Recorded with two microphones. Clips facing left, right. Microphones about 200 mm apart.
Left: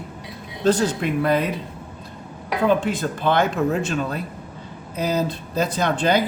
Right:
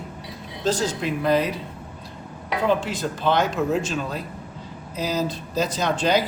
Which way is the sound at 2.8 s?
55° left (ahead or behind).